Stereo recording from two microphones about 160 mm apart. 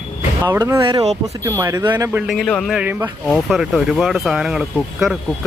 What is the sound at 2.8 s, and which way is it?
Speech, 10° right (ahead or behind).